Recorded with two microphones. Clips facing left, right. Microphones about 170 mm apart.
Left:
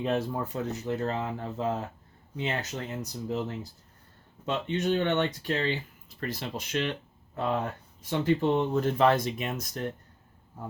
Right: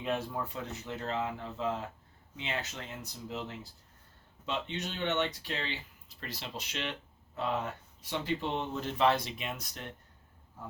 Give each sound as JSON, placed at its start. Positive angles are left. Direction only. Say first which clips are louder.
{"t": 0.0, "sound": "speech", "louder": "left 5 dB", "side_deg": 45}